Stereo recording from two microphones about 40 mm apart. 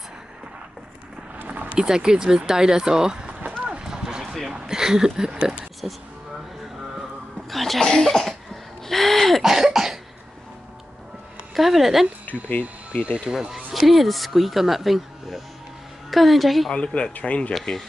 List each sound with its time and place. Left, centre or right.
1.4 s a sound: right
1.8 s speech: centre
3.3 s a sound: right
3.8 s a sound: centre
4.6 s speech: centre
7.0 s music: centre
7.8 s cough: centre
8.8 s speech: centre
9.4 s cough: centre
11.5 s speech: centre
13.0 s speech: right
13.3 s speech: centre
16.7 s speech: left